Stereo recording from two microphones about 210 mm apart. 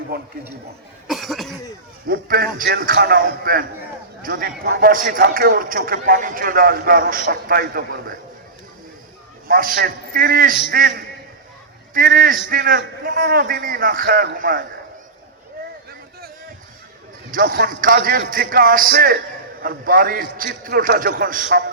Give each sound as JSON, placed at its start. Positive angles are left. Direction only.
{"t": 1.1, "sound": "cough", "side_deg": 0}
{"t": 2.0, "sound": "speech", "side_deg": -45}
{"t": 9.5, "sound": "speech", "side_deg": -45}
{"t": 17.3, "sound": "speech", "side_deg": -40}